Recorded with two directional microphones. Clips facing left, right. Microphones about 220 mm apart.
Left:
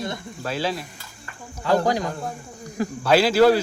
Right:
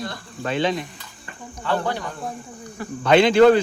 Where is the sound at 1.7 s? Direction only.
35° left (ahead or behind).